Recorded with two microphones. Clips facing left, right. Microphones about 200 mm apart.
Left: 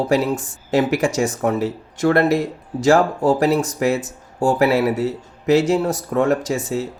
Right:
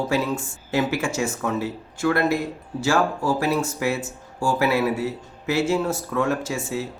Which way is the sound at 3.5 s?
35° left (ahead or behind).